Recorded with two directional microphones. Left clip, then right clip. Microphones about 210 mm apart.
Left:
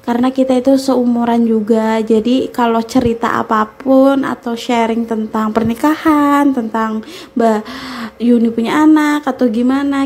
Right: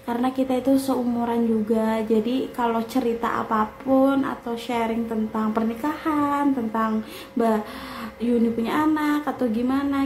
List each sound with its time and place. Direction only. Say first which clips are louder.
0.1 s a woman's voice: left 10 dB; 35° left (ahead or behind)